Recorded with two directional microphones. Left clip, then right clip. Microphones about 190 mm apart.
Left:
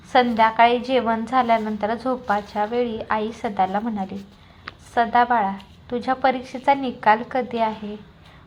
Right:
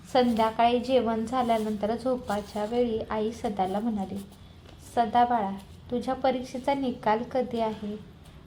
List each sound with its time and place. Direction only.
0.1 s a woman's voice: 10° left (ahead or behind)